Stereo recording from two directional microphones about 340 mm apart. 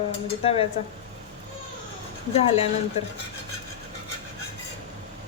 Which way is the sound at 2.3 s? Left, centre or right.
Centre.